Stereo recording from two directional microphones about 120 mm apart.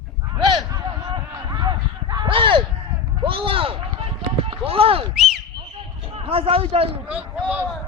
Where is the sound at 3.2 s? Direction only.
45° right (ahead or behind).